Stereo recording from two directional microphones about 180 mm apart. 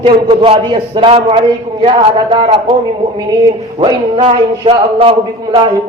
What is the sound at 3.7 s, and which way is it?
A man's voice, 25° right (ahead or behind).